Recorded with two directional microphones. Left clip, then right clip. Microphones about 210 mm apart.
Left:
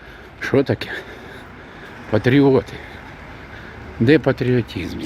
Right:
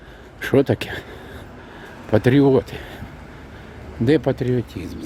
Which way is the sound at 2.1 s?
10° right (ahead or behind).